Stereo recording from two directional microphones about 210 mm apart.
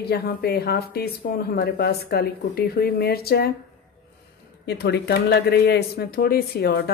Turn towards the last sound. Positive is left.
turn(degrees=45)  # may be behind; listen again after turning